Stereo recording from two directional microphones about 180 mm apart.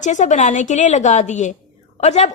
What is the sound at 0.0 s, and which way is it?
A woman's voice, 40° left (ahead or behind).